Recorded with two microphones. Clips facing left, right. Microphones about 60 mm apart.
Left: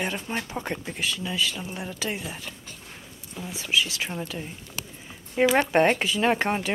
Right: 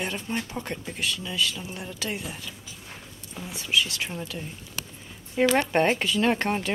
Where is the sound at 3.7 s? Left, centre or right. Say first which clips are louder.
Even; centre.